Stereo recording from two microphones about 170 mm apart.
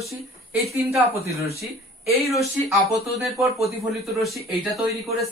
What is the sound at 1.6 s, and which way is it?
Speech, centre (ahead or behind).